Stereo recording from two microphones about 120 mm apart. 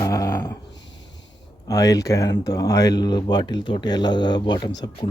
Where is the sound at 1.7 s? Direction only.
30° left (ahead or behind).